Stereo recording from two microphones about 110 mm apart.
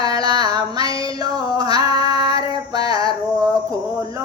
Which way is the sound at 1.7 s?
55° left (ahead or behind).